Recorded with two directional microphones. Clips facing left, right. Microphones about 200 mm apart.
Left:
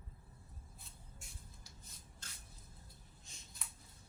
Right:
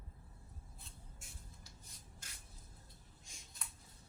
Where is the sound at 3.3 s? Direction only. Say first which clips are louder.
Right 1 dB; 10° right (ahead or behind).